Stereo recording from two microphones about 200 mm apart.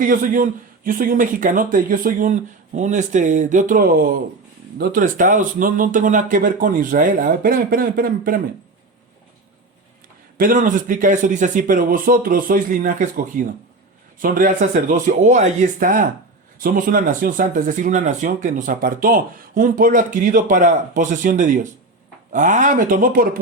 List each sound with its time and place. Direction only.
0.0 s speech: 45° right (ahead or behind)
10.3 s speech: 40° right (ahead or behind)